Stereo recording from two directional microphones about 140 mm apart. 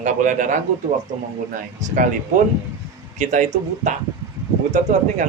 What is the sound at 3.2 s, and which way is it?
Speech, 60° right (ahead or behind).